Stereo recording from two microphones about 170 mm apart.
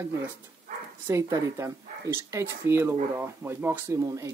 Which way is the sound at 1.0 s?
15° right (ahead or behind).